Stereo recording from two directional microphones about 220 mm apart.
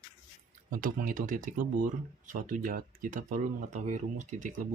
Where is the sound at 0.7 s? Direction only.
40° right (ahead or behind).